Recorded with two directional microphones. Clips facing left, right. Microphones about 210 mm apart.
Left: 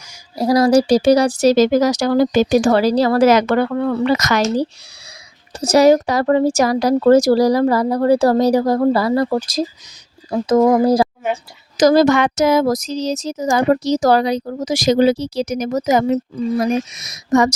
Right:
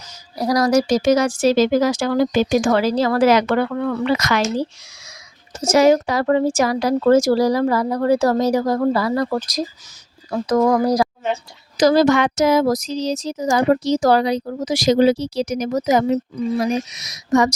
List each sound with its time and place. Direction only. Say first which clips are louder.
0.3 s speech: left 4 dB; 25° left (ahead or behind)
11.8 s speech: left 2 dB; 45° left (ahead or behind)